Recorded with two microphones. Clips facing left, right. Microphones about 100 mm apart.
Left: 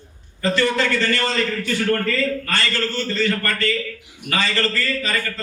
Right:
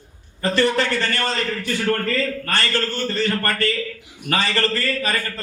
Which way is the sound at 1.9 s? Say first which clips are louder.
Left 1 dB; 35° right (ahead or behind).